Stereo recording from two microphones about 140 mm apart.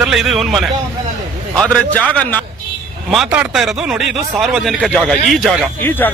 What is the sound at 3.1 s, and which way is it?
A man's voice, centre (ahead or behind).